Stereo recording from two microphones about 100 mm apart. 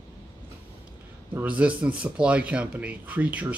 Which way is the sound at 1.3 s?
15° right (ahead or behind).